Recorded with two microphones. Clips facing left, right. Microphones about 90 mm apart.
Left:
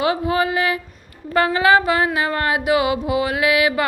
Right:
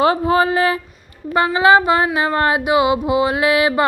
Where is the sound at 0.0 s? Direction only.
35° right (ahead or behind).